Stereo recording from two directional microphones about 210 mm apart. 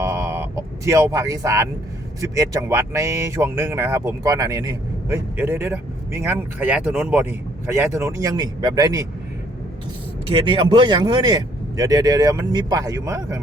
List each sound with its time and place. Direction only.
0.0 s a sound: 15° right (ahead or behind)
2.3 s speech: 15° right (ahead or behind)
10.4 s speech: 25° right (ahead or behind)